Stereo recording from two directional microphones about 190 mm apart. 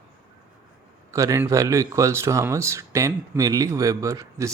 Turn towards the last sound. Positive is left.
turn(degrees=-15)  # may be behind; listen again after turning